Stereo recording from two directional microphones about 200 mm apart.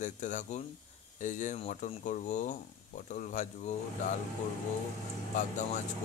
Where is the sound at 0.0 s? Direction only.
40° left (ahead or behind).